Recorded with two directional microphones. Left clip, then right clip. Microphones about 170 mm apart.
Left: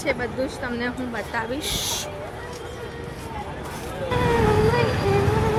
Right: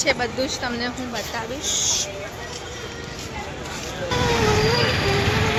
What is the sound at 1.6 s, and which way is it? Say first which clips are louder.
Speech: right 3 dB; 55° left (ahead or behind).